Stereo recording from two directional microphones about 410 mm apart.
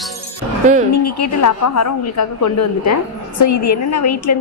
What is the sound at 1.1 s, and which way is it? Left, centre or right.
A woman's voice, left.